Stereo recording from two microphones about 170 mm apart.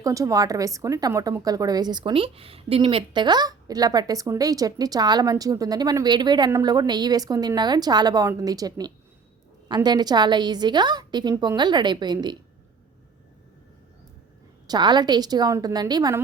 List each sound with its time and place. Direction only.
0.0 s a woman's voice: 20° right (ahead or behind)
14.7 s a woman's voice: 25° right (ahead or behind)